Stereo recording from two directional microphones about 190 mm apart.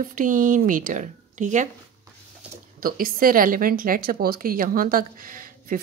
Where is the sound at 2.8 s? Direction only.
50° right (ahead or behind).